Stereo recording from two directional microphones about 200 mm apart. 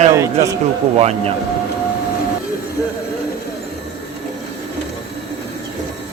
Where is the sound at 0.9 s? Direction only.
30° right (ahead or behind).